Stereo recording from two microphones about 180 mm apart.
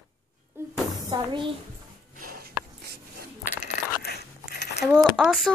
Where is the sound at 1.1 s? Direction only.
25° right (ahead or behind).